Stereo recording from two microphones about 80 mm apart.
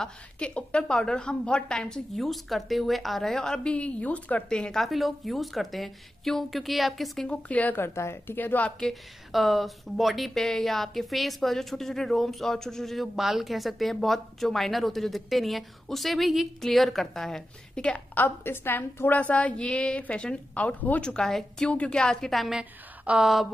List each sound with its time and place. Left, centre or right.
0.0 s speech: centre
7.2 s speech: centre
7.8 s speech: left
8.6 s speech: centre
9.3 s speech: centre
22.6 s a sound: centre